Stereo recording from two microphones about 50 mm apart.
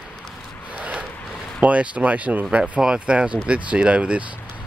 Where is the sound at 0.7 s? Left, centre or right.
Right.